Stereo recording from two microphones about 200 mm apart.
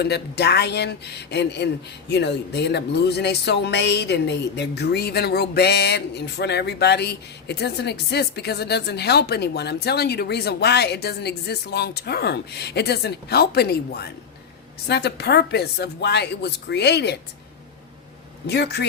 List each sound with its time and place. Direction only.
0.0 s speech: 55° left (ahead or behind)
18.4 s speech: 55° left (ahead or behind)